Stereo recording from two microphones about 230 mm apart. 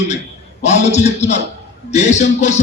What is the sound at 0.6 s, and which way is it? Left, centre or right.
A man's voice, left.